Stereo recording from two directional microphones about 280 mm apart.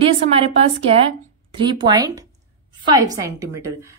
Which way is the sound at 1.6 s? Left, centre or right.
Centre.